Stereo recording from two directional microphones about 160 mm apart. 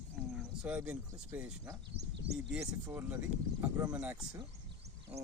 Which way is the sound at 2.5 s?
10° right (ahead or behind).